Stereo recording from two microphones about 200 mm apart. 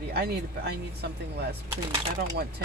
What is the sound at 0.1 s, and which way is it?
Speech, 55° right (ahead or behind).